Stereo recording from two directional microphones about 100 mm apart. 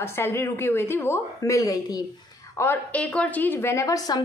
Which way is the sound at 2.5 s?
25° left (ahead or behind).